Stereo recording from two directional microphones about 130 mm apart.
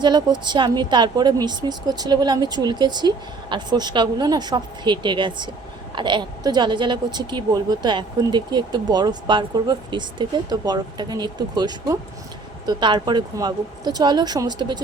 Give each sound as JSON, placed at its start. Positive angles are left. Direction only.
{"t": 0.0, "sound": "speech", "side_deg": -35}